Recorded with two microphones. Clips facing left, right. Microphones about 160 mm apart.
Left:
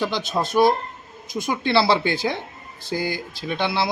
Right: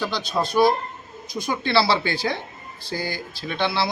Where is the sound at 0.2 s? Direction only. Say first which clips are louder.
Even; 50° left (ahead or behind).